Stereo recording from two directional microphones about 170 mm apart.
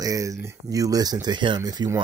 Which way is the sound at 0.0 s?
20° right (ahead or behind).